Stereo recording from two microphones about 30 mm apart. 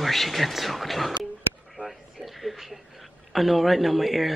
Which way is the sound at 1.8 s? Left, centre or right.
Left.